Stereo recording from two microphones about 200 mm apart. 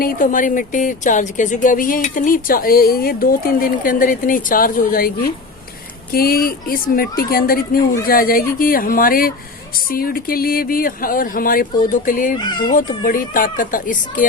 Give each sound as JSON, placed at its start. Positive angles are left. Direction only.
{"t": 0.0, "sound": "speech", "side_deg": 45}
{"t": 12.4, "sound": "speech", "side_deg": 20}
{"t": 13.0, "sound": "speech", "side_deg": 45}